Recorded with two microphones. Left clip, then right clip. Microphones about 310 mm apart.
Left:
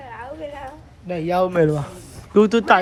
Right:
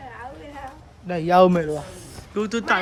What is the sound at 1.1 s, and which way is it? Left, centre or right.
Speech, centre.